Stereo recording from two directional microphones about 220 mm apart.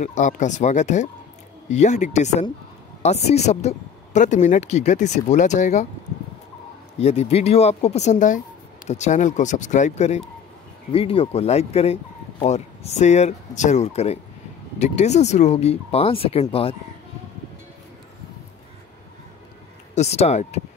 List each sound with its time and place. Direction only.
0.0 s speech: 35° left (ahead or behind)
7.0 s speech: 30° left (ahead or behind)
20.0 s speech: 30° left (ahead or behind)